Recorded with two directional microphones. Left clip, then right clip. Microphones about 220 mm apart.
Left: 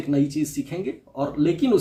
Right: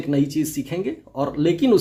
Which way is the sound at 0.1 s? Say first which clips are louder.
Right 1 dB; 40° right (ahead or behind).